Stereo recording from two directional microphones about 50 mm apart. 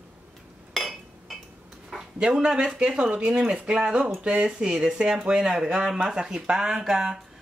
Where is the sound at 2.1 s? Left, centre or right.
Centre.